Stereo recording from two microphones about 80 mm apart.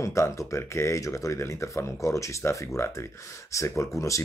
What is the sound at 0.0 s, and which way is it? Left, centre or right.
Speech, left.